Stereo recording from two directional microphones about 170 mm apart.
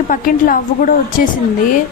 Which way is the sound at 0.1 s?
55° left (ahead or behind).